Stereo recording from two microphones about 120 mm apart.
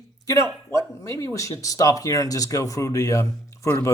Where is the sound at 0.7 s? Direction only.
25° left (ahead or behind).